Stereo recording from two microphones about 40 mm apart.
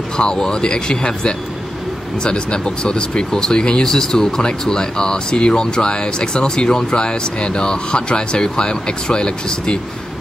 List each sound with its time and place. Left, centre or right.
0.2 s speech: left